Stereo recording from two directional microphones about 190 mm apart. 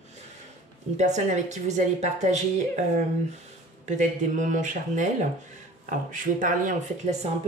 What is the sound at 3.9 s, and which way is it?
Speech, 40° right (ahead or behind).